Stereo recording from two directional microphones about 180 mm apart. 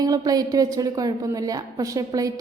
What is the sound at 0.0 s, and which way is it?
A woman's voice, 20° right (ahead or behind).